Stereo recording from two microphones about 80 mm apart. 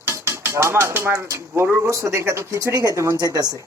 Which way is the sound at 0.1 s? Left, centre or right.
Right.